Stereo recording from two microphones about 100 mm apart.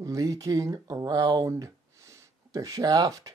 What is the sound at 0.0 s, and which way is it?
Speech, 35° right (ahead or behind).